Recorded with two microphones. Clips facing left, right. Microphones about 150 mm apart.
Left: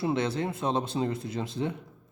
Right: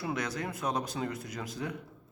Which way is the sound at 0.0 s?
25° left (ahead or behind).